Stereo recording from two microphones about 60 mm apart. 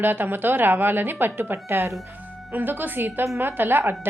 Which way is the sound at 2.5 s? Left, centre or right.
Right.